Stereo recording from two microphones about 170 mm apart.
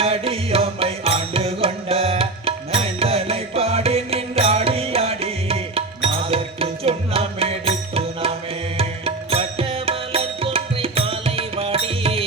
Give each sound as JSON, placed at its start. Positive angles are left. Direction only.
{"t": 0.0, "sound": "music", "side_deg": -35}